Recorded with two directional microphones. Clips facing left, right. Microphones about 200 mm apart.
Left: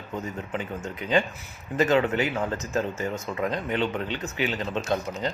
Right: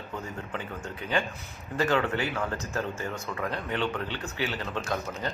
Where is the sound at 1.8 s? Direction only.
20° left (ahead or behind).